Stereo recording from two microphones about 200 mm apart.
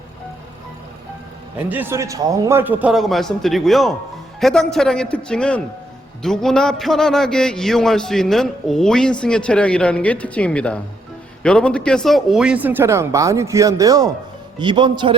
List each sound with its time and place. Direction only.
1.5 s a man's voice: 10° right (ahead or behind)